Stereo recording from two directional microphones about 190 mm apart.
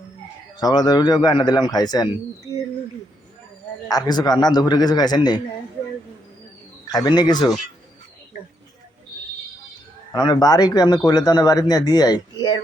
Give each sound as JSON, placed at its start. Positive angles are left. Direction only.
{"t": 0.6, "sound": "a man's voice", "side_deg": 20}
{"t": 3.8, "sound": "a man's voice", "side_deg": 20}
{"t": 6.8, "sound": "a man's voice", "side_deg": 20}
{"t": 10.1, "sound": "a man's voice", "side_deg": 20}